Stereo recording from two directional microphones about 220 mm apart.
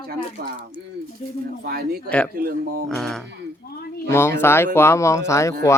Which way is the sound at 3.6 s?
45° left (ahead or behind).